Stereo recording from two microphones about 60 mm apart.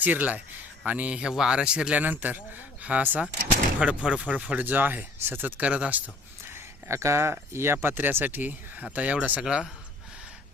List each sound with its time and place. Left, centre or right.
0.0 s speech: right
4.6 s speech: right
5.6 s speech: right
6.5 s speech: right
9.4 s speech: centre